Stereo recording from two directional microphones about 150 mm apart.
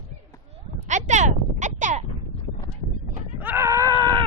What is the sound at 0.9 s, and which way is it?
Speech, 55° right (ahead or behind).